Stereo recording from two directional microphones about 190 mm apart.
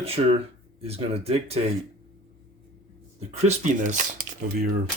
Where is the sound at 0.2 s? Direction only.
30° right (ahead or behind).